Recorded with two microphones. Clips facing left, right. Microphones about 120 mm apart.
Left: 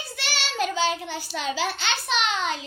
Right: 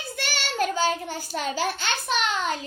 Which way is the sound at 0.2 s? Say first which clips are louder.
Right 1 dB; 50° right (ahead or behind).